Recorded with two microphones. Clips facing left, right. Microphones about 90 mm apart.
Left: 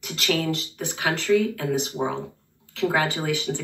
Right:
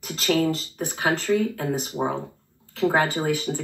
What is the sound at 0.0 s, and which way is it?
Speech, 35° right (ahead or behind).